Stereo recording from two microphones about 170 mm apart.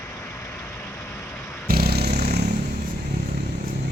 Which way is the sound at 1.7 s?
65° right (ahead or behind).